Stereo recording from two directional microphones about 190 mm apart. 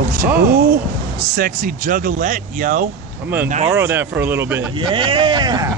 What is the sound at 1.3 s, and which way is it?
Speech, 45° right (ahead or behind).